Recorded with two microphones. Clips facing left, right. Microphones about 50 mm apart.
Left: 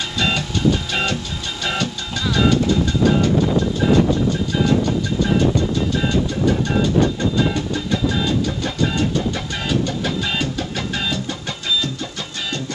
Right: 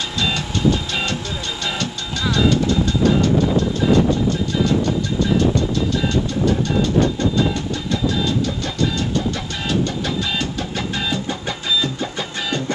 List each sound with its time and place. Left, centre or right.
1.6 s music: centre
2.3 s vehicle: centre
7.3 s music: centre
11.8 s music: right